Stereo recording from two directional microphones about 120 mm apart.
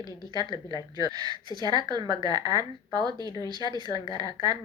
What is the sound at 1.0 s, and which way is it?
A woman's voice, 35° right (ahead or behind).